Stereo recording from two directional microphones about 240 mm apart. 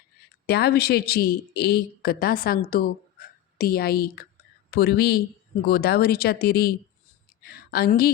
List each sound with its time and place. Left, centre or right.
0.4 s a woman's voice: left